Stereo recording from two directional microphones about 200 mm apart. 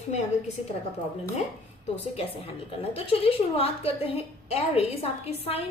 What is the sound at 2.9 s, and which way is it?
A woman's voice, 30° left (ahead or behind).